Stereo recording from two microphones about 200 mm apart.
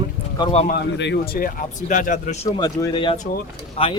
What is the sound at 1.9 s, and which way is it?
Speech, 40° left (ahead or behind).